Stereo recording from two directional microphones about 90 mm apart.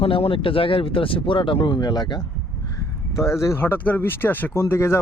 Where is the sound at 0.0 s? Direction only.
90° left; by 2.2 s 50° left (ahead or behind).